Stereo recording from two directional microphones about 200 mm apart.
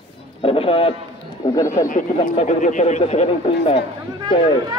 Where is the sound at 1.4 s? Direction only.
15° left (ahead or behind).